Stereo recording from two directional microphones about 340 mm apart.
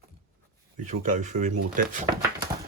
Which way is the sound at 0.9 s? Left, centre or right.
Right.